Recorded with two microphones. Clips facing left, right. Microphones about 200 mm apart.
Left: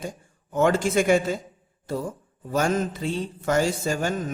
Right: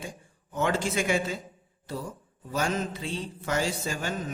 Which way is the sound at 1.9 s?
50° left (ahead or behind).